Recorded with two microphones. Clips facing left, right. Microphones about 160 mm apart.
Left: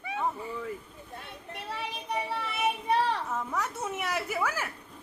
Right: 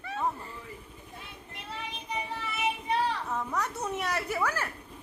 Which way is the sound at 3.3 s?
Centre (ahead or behind).